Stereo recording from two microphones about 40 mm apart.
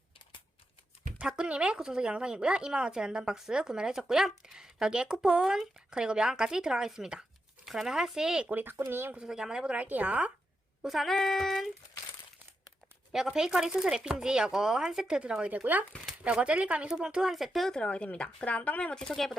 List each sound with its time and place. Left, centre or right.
1.5 s speech: right
8.4 s speech: right
8.7 s speech: right
9.2 s speech: centre
9.7 s speech: right
10.8 s speech: centre
11.1 s child singing: centre
13.1 s speech: centre
15.2 s speech: right
17.1 s speech: centre
17.3 s speech: centre
17.7 s speech: left
18.8 s child singing: left